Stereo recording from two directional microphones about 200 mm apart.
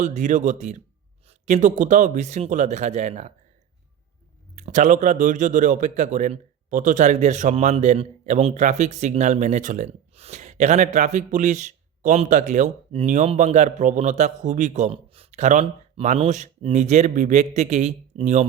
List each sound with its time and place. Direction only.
0.0 s speech: 35° right (ahead or behind)
4.5 s speech: 40° right (ahead or behind)